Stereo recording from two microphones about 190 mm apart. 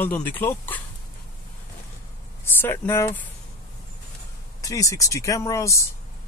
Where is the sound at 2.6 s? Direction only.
15° left (ahead or behind).